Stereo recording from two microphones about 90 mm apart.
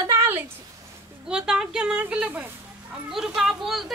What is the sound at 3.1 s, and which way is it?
Speech, 5° right (ahead or behind).